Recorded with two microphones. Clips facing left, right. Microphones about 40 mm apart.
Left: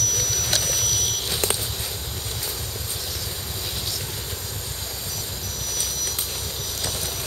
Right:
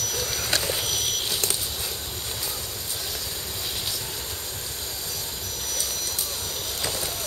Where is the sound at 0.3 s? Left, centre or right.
Right.